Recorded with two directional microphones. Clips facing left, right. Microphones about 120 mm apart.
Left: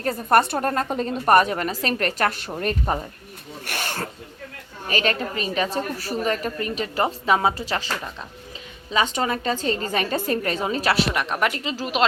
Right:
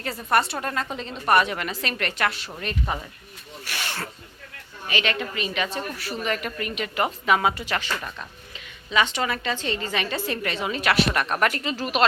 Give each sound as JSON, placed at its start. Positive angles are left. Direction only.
{"t": 0.0, "sound": "a woman's voice", "side_deg": 45}
{"t": 3.7, "sound": "snake", "side_deg": 45}
{"t": 4.9, "sound": "a woman's voice", "side_deg": 40}
{"t": 8.9, "sound": "a woman's voice", "side_deg": 40}
{"t": 11.1, "sound": "speech", "side_deg": 15}